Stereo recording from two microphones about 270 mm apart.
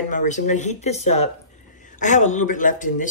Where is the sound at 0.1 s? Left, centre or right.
Left.